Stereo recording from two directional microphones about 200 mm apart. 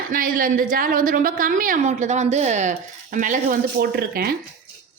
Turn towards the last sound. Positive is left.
turn(degrees=-50)  # may be behind; listen again after turning